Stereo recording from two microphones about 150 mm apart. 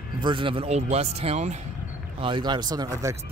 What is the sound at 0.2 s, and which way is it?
Speech, 35° right (ahead or behind).